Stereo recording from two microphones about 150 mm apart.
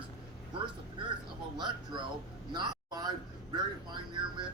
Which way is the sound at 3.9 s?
30° right (ahead or behind).